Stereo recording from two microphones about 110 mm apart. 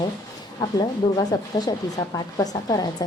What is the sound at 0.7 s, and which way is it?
Speech, 40° left (ahead or behind).